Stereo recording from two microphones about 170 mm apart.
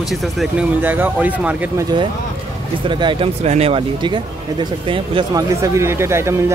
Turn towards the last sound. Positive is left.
turn(degrees=-15)  # may be behind; listen again after turning